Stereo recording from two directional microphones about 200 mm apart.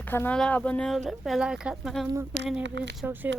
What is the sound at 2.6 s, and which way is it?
Speech, 60° right (ahead or behind).